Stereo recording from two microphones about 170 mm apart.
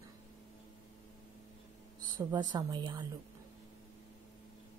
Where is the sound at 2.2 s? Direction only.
25° right (ahead or behind).